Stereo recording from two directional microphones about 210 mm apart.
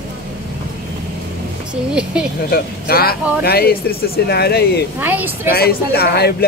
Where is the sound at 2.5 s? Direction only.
45° left (ahead or behind).